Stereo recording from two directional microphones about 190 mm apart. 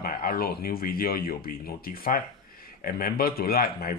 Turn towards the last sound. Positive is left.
turn(degrees=50)  # may be behind; listen again after turning